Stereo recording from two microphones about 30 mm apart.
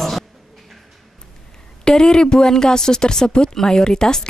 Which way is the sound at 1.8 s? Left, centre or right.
Left.